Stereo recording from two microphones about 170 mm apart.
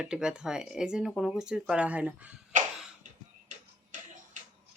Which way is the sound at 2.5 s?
45° right (ahead or behind).